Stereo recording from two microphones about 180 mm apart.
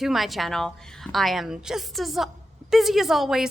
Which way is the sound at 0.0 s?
Centre (ahead or behind).